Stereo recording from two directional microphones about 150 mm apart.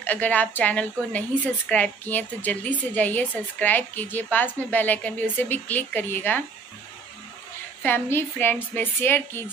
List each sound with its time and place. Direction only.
0.0 s a woman's voice: 10° left (ahead or behind)
7.8 s a woman's voice: 15° left (ahead or behind)